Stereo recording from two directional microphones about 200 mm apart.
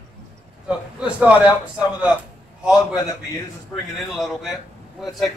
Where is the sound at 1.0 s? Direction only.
5° right (ahead or behind).